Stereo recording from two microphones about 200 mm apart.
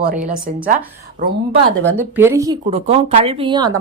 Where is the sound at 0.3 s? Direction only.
40° right (ahead or behind).